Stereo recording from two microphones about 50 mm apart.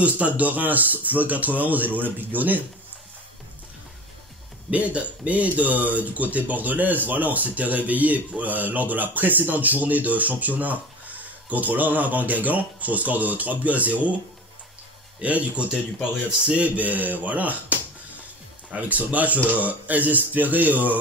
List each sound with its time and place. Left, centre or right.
0.0 s speech: right
4.6 s speech: right